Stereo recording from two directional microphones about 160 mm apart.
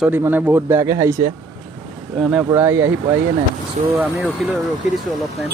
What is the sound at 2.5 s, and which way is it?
Speech, 15° right (ahead or behind).